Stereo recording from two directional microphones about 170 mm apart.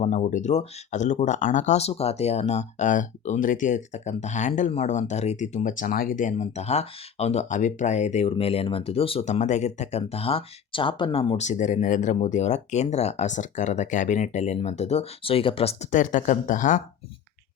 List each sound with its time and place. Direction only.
0.0 s speech: 45° left (ahead or behind)